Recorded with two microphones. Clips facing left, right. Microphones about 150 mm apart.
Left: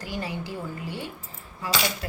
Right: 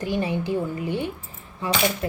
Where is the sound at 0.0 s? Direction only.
20° right (ahead or behind).